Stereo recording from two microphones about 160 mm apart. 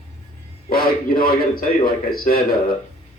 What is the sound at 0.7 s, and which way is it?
A man's voice, 65° left (ahead or behind).